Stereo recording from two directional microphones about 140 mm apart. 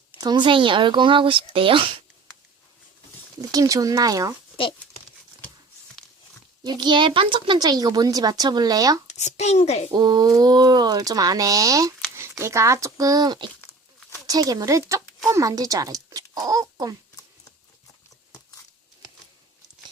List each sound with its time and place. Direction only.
0.2 s speech: 30° right (ahead or behind)
3.5 s speech: 25° right (ahead or behind)
6.7 s speech: 30° right (ahead or behind)
9.0 s a child's voice: 55° left (ahead or behind)
9.9 s speech: 30° right (ahead or behind)